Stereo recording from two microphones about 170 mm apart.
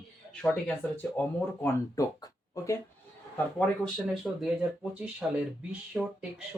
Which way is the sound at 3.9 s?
Centre (ahead or behind).